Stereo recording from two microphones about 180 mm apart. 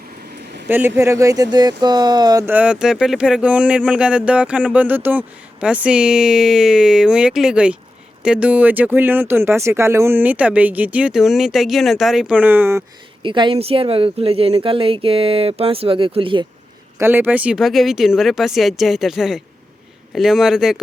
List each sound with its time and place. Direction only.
0.3 s a sound: 65° right (ahead or behind)
0.7 s speech: 10° right (ahead or behind)
2.5 s speech: 5° right (ahead or behind)
13.2 s speech: 25° right (ahead or behind)
17.0 s speech: 10° right (ahead or behind)